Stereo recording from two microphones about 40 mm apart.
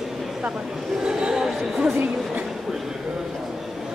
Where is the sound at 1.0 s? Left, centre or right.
Centre.